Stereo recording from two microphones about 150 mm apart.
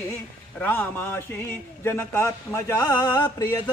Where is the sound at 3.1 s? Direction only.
30° left (ahead or behind).